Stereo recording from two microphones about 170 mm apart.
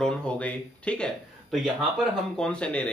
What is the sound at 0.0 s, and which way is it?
Speech, 5° left (ahead or behind).